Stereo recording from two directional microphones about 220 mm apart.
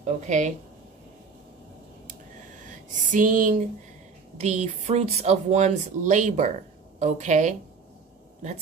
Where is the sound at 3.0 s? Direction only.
35° right (ahead or behind).